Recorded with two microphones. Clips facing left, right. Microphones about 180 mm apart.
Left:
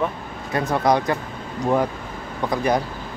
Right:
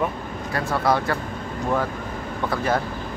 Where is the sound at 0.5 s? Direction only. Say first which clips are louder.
Left 3 dB; 20° left (ahead or behind).